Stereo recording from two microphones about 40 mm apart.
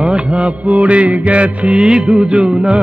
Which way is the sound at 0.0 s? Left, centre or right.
Right.